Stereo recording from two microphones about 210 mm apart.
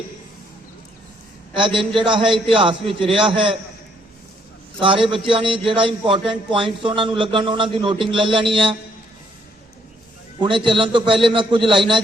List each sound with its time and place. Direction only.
1.5 s a man's voice: 25° right (ahead or behind)
4.8 s a man's voice: 25° right (ahead or behind)
10.4 s a man's voice: 25° right (ahead or behind)